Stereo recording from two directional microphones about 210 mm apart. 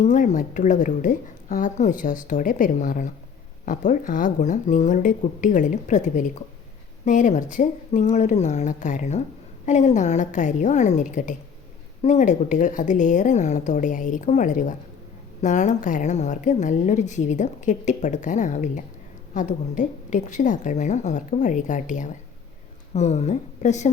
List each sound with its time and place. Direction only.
0.0 s a woman's voice: 35° left (ahead or behind)